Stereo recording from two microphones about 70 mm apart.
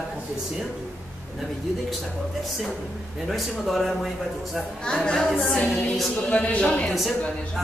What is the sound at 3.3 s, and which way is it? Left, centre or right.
Speech, centre.